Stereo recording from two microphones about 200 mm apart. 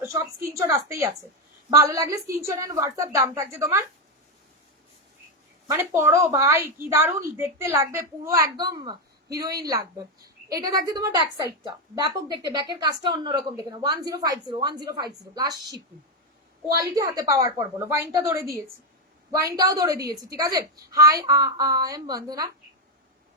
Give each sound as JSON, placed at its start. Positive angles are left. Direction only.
{"t": 0.0, "sound": "a sound", "side_deg": -10}
{"t": 0.4, "sound": "a woman's voice", "side_deg": -15}
{"t": 5.7, "sound": "a woman's voice", "side_deg": -15}